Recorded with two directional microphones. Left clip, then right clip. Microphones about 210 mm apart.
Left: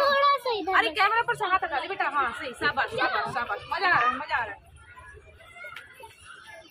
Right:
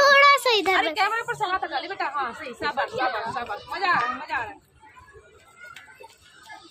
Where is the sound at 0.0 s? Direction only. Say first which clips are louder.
Right 7 dB; 30° right (ahead or behind).